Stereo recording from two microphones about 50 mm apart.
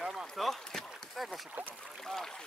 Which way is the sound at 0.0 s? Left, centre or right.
Centre.